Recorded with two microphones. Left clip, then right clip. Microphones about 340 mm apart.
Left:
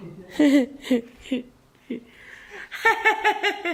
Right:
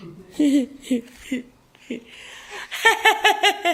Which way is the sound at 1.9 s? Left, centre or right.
Centre.